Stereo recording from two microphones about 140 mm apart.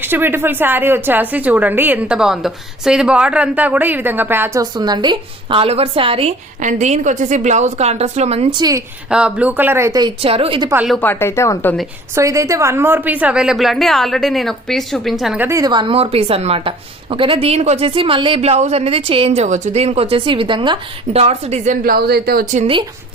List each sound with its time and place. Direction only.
0.0 s a woman's voice: 15° right (ahead or behind)
4.6 s a woman's voice: 30° right (ahead or behind)
6.6 s a woman's voice: 60° right (ahead or behind)
8.4 s a woman's voice: 30° right (ahead or behind)
9.0 s a woman's voice: 5° right (ahead or behind); by 10.1 s 25° right (ahead or behind)
10.2 s a woman's voice: 40° right (ahead or behind)
10.8 s a woman's voice: centre (ahead or behind)
11.0 s a woman's voice: 15° left (ahead or behind)
12.1 s a woman's voice: 20° right (ahead or behind); by 15.4 s centre (ahead or behind)
15.4 s a woman's voice: 20° right (ahead or behind); by 22.6 s 90° right